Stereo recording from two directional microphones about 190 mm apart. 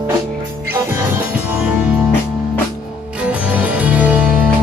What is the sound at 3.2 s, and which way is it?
Music, 5° right (ahead or behind).